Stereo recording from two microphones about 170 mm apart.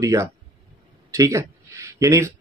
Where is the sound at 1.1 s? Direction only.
20° right (ahead or behind).